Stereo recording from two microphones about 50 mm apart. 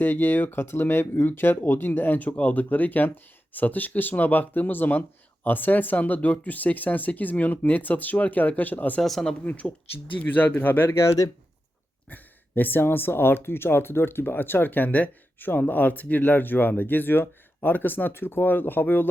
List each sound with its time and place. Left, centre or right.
0.0 s speech: left
9.0 s speech: centre
9.4 s speech: left
10.8 s speech: left
12.0 s speech: left